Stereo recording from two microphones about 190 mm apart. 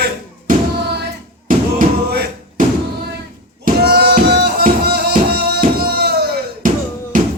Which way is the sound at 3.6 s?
55° right (ahead or behind).